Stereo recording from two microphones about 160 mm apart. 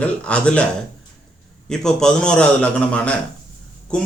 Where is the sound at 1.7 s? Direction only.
5° left (ahead or behind).